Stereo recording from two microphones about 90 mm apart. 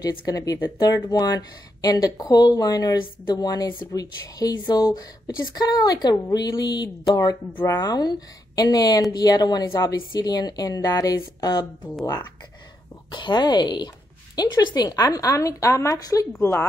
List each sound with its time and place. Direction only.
0.0 s a woman's voice: 45° left (ahead or behind)
13.1 s a woman's voice: 60° left (ahead or behind); by 16.6 s 30° left (ahead or behind)